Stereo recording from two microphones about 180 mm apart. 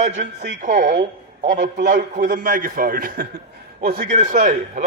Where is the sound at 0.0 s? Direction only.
40° right (ahead or behind).